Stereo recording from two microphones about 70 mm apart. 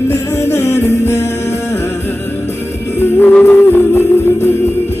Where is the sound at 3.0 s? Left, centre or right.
Left.